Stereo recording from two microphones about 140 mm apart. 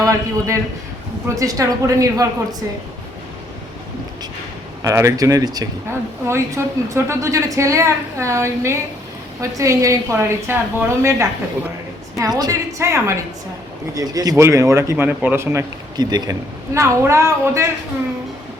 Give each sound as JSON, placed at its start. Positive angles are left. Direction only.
{"t": 0.0, "sound": "a man's voice", "side_deg": -20}
{"t": 4.8, "sound": "a woman's voice", "side_deg": -25}
{"t": 16.0, "sound": "a woman's voice", "side_deg": -30}